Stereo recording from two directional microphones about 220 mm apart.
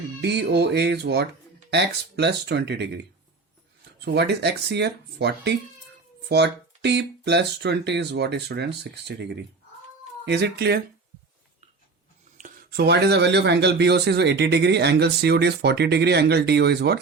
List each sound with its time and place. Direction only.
0.2 s speech: 50° right (ahead or behind)
4.0 s speech: 50° right (ahead or behind)
12.4 s speech: 40° right (ahead or behind)